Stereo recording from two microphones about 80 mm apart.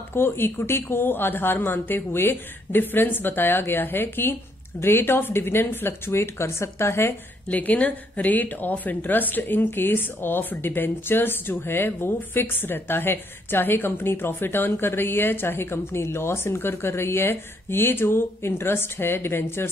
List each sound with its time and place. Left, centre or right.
0.1 s a woman's voice: left
7.4 s a woman's voice: centre